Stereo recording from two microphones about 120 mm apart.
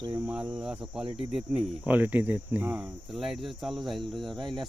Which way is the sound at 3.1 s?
Centre (ahead or behind).